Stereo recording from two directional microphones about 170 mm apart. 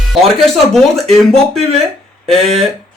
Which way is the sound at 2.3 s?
35° right (ahead or behind).